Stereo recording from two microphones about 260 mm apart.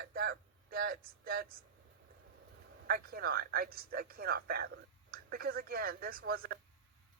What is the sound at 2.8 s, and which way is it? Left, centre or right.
Speech, right.